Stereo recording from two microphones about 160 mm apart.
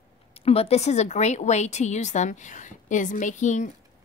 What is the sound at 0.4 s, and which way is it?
A woman's voice, 40° left (ahead or behind).